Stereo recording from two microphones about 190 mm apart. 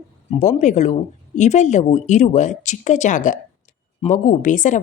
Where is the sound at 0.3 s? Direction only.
40° left (ahead or behind).